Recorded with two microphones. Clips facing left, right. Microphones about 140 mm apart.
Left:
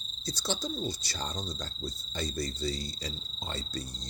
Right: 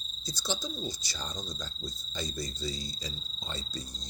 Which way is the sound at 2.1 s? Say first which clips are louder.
Left 3 dB; 65° left (ahead or behind).